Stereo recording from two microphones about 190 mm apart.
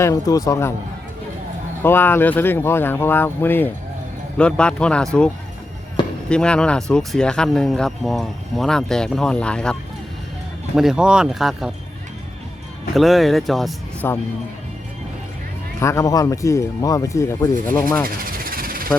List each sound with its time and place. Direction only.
0.0 s speech: 20° left (ahead or behind)
1.8 s speech: 10° left (ahead or behind)
6.2 s speech: 5° left (ahead or behind)
10.8 s speech: 5° right (ahead or behind)
12.9 s speech: centre (ahead or behind)
15.8 s speech: 15° left (ahead or behind)
18.0 s a sound: 50° right (ahead or behind)